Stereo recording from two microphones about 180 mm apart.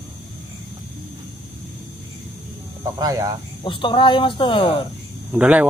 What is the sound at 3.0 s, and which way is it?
Speech, 20° right (ahead or behind).